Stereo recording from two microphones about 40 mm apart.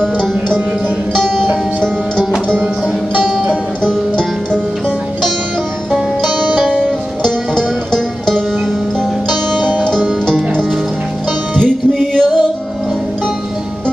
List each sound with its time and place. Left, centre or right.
0.5 s music: left
1.2 s music: centre
3.3 s music: centre
5.9 s music: centre
7.5 s music: centre
11.6 s music: centre